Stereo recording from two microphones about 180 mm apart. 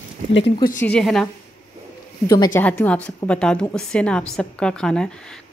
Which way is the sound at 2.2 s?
20° left (ahead or behind).